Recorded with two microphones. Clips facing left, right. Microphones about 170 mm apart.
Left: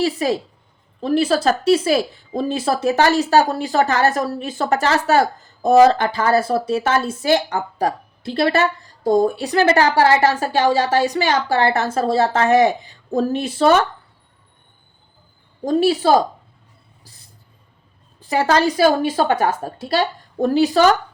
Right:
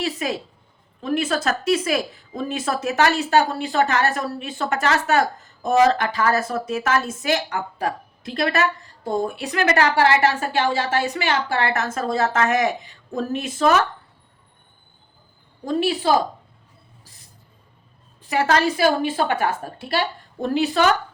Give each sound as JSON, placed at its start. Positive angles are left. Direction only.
{"t": 0.0, "sound": "speech", "side_deg": 35}
{"t": 15.6, "sound": "speech", "side_deg": 40}
{"t": 18.2, "sound": "a woman's voice", "side_deg": 35}